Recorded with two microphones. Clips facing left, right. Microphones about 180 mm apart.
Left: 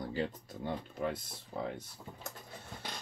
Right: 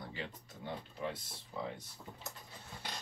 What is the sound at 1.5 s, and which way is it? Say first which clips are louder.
Speech: left 3 dB; 50° left (ahead or behind).